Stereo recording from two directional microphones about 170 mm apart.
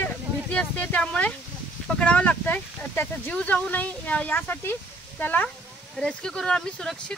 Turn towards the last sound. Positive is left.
turn(degrees=5)  # may be behind; listen again after turning